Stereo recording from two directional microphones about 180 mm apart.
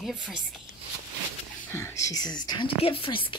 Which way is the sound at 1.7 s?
15° left (ahead or behind).